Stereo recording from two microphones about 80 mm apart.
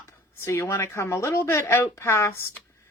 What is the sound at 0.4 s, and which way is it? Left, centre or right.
Speech, left.